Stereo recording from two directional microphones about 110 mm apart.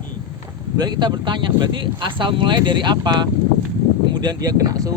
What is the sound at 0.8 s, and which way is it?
Speech, 40° right (ahead or behind).